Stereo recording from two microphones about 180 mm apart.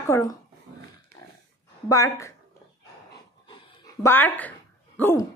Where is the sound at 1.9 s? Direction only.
20° left (ahead or behind).